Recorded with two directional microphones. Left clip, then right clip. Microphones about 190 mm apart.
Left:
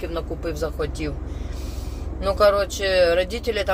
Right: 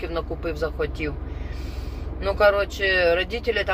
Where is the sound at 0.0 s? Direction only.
5° left (ahead or behind).